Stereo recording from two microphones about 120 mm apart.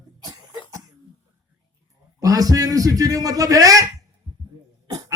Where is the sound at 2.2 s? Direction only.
30° right (ahead or behind).